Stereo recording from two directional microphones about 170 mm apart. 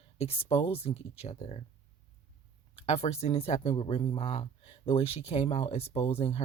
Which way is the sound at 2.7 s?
40° left (ahead or behind).